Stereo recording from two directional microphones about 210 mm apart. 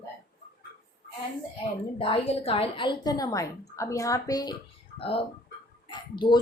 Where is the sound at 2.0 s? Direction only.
30° left (ahead or behind).